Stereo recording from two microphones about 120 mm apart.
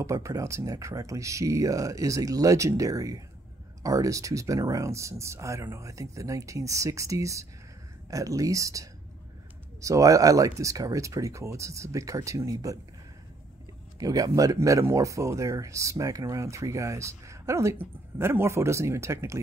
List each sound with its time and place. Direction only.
0.0 s speech: 25° right (ahead or behind)
13.9 s speech: 30° right (ahead or behind)